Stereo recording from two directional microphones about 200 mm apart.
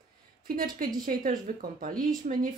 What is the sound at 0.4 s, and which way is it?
Speech, 45° right (ahead or behind).